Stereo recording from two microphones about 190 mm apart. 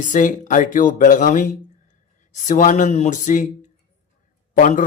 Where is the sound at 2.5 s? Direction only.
40° left (ahead or behind).